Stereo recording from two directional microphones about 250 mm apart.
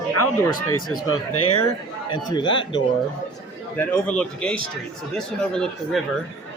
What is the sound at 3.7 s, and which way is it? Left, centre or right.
Speech, centre.